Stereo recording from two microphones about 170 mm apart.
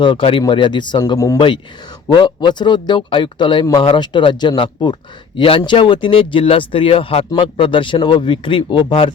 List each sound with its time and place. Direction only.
0.0 s speech: 30° left (ahead or behind)